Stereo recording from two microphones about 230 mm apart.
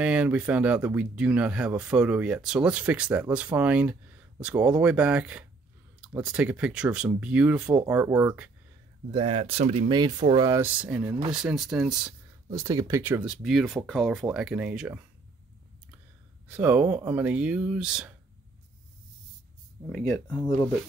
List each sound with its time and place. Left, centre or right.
0.0 s speech: centre
9.1 s speech: right; by 12.1 s centre
12.4 s speech: centre
16.4 s speech: centre
19.9 s speech: centre
20.3 s speech: centre